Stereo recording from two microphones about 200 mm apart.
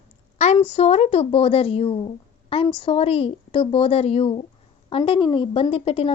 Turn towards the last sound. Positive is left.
turn(degrees=30)  # may be behind; listen again after turning